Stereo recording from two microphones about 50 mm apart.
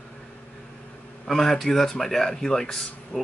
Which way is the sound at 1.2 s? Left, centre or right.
Centre.